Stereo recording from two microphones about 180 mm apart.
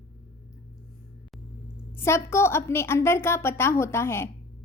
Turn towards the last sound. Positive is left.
turn(degrees=15)  # may be behind; listen again after turning